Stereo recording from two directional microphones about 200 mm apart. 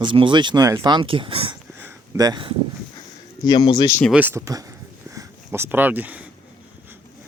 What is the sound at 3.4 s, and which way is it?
Speech, 20° left (ahead or behind).